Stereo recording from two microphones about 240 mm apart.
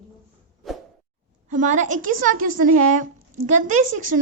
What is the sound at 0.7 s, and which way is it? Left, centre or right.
Whoosh, centre.